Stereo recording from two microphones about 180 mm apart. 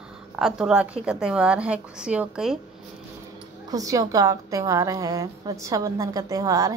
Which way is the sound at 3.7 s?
20° right (ahead or behind).